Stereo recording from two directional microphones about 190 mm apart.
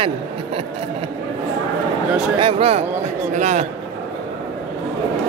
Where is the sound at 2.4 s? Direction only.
30° right (ahead or behind).